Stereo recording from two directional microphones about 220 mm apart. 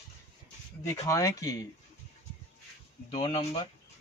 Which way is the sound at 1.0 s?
15° left (ahead or behind).